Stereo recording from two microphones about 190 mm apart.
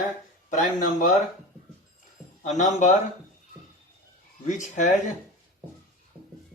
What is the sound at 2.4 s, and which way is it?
Speech, 40° left (ahead or behind).